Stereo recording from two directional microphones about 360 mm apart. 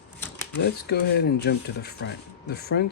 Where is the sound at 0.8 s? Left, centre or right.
Left.